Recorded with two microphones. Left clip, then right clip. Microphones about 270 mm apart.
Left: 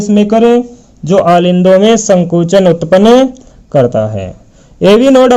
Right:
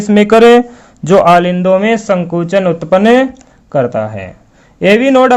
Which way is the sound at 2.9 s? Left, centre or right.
Right.